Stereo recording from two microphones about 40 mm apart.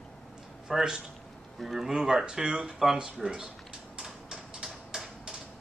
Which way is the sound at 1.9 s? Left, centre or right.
Centre.